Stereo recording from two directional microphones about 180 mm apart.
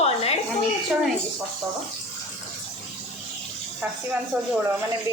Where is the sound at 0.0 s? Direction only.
35° left (ahead or behind).